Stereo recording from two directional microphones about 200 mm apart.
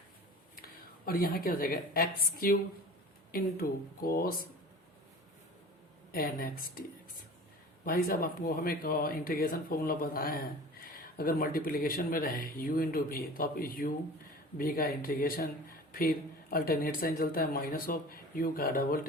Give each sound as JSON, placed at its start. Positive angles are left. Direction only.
{"t": 1.0, "sound": "speech", "side_deg": 45}
{"t": 6.1, "sound": "speech", "side_deg": 45}
{"t": 7.9, "sound": "speech", "side_deg": 45}